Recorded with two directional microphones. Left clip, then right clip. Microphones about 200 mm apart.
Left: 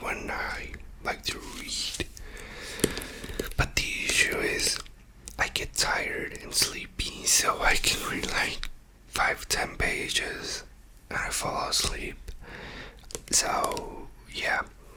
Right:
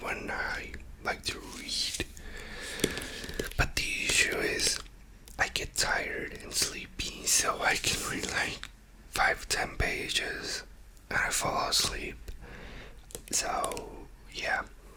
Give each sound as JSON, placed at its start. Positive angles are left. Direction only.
{"t": 0.0, "sound": "whispering", "side_deg": -5}
{"t": 11.1, "sound": "whispering", "side_deg": -20}
{"t": 12.5, "sound": "a sound", "side_deg": 10}
{"t": 13.2, "sound": "whispering", "side_deg": 10}